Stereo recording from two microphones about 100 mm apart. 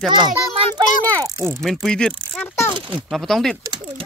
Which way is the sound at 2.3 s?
25° left (ahead or behind).